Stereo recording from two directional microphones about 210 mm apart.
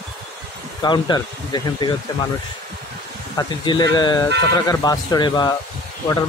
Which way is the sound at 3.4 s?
20° left (ahead or behind).